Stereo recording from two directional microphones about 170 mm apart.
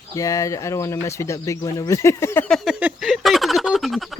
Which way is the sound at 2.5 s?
Centre (ahead or behind).